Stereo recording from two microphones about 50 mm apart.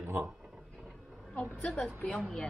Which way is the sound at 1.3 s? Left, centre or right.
Left.